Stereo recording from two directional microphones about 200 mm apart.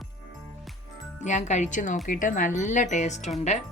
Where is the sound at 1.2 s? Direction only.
35° left (ahead or behind).